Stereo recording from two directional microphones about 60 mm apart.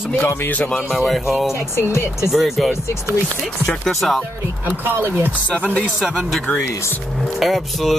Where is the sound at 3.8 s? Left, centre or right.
Centre.